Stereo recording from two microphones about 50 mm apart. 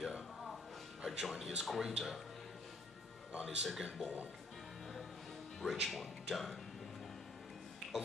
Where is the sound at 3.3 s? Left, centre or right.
Centre.